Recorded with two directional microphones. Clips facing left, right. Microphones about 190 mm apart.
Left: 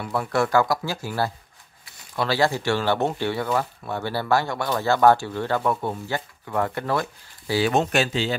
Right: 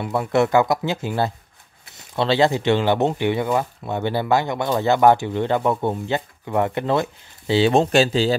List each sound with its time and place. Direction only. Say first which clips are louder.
0.0 s speech: right 4 dB; 20° right (ahead or behind)